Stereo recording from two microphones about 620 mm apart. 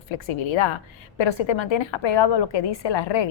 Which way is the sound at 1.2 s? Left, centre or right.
Left.